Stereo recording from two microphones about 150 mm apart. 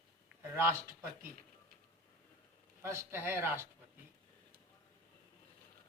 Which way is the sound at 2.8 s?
15° right (ahead or behind).